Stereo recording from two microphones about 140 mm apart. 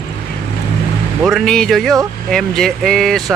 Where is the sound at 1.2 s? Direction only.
5° left (ahead or behind).